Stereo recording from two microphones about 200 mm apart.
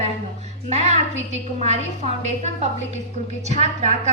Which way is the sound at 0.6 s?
35° right (ahead or behind).